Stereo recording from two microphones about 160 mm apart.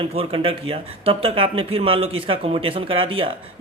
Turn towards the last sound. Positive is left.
turn(degrees=-35)  # may be behind; listen again after turning